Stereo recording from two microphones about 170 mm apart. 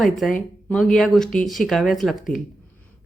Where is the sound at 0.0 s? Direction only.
Centre (ahead or behind).